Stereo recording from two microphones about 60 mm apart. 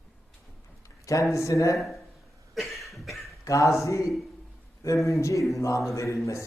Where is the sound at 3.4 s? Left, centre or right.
Left.